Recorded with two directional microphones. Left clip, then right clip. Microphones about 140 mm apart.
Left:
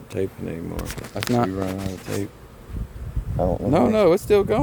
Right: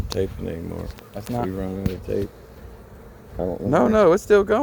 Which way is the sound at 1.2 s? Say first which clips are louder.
Left 7 dB; 65° left (ahead or behind).